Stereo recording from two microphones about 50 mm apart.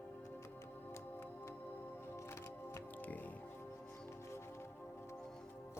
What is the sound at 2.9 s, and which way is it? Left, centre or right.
Music, left.